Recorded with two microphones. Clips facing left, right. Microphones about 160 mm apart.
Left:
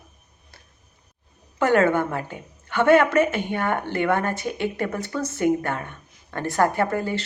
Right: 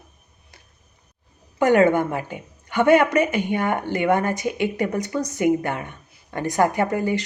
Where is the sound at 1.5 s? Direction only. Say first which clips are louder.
Right 3 dB; 15° right (ahead or behind).